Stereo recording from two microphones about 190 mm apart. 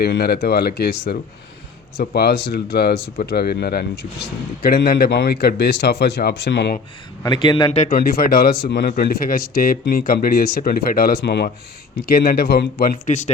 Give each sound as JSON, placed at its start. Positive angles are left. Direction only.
{"t": 0.0, "sound": "speech", "side_deg": 55}
{"t": 7.2, "sound": "a man's voice", "side_deg": 25}
{"t": 7.9, "sound": "speech", "side_deg": 50}
{"t": 13.1, "sound": "speech", "side_deg": 40}